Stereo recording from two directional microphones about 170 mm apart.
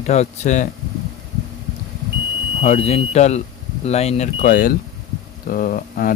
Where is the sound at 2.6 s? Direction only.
40° left (ahead or behind).